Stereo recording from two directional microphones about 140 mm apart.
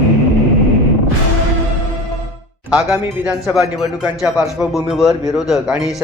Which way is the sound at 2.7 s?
5° right (ahead or behind).